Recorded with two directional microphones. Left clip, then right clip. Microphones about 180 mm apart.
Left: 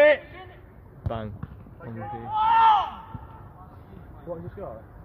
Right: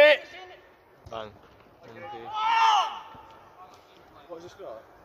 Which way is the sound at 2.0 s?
25° right (ahead or behind).